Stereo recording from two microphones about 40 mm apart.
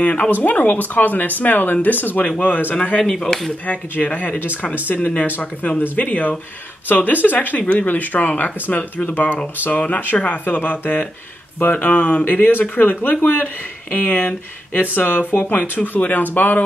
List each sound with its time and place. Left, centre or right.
0.0 s speech: left
0.3 s speech: left
3.0 s speech: centre
3.6 s speech: left